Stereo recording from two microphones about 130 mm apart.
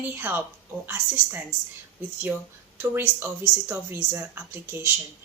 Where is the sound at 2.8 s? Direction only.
15° right (ahead or behind).